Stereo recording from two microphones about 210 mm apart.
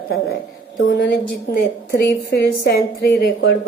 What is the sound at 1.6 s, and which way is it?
A woman's voice, 50° left (ahead or behind).